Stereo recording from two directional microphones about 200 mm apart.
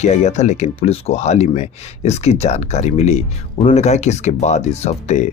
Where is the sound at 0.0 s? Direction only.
35° left (ahead or behind).